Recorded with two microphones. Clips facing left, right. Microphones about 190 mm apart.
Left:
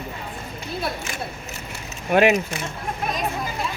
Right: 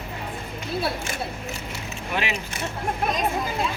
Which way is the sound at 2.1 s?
50° left (ahead or behind).